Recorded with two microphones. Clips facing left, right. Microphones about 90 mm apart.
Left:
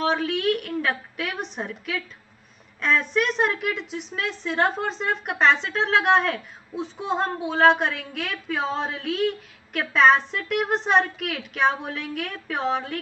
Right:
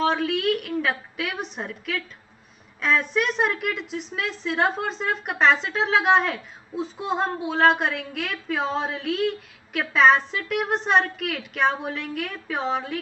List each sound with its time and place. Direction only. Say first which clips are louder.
0.0 s a woman's voice: right 1 dB; centre (ahead or behind)